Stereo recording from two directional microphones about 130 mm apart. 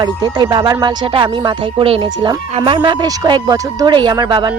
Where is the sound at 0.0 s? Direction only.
35° right (ahead or behind).